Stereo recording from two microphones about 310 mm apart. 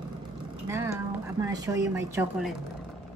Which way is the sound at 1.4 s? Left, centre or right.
Centre.